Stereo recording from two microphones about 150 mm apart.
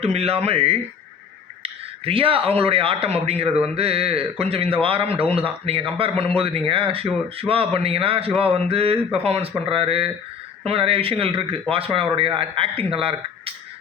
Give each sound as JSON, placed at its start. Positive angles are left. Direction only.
{"t": 0.0, "sound": "speech", "side_deg": -40}